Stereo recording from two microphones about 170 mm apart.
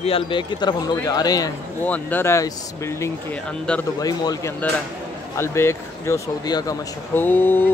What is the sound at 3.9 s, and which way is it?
Speech, 20° left (ahead or behind).